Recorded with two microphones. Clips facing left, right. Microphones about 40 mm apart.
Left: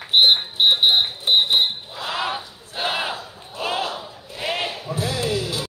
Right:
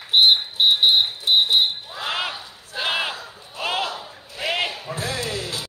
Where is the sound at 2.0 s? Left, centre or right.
Right.